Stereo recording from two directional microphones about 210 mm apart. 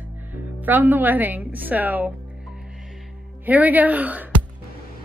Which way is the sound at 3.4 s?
10° right (ahead or behind).